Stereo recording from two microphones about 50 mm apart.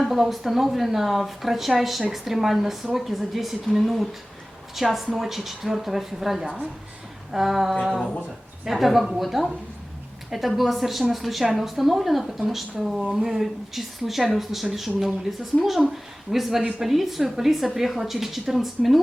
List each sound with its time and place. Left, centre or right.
0.0 s speech: centre
6.4 s speech: centre
7.3 s a woman's voice: centre